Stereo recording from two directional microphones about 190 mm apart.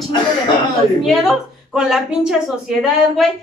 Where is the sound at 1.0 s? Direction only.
Centre (ahead or behind).